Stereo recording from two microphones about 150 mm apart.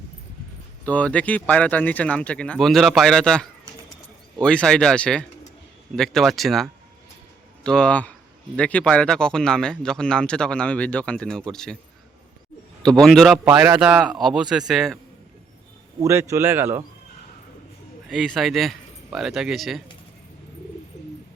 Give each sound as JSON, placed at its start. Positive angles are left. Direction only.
{"t": 0.9, "sound": "speech", "side_deg": 10}
{"t": 12.8, "sound": "speech", "side_deg": 5}
{"t": 16.0, "sound": "speech", "side_deg": -20}
{"t": 18.1, "sound": "speech", "side_deg": 0}
{"t": 20.9, "sound": "bird", "side_deg": 50}